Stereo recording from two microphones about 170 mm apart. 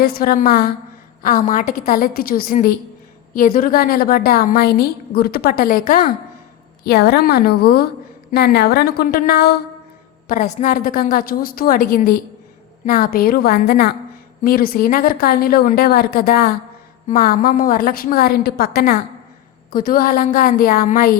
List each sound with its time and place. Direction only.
0.0 s a woman's voice: 60° left (ahead or behind)
6.8 s a woman's voice: 70° left (ahead or behind)
10.2 s a woman's voice: 50° left (ahead or behind)